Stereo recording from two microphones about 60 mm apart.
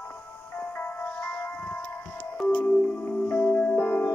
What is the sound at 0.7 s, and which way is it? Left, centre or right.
Music, left.